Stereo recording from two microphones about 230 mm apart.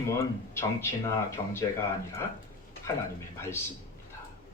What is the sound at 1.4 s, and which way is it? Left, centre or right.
Speech, left.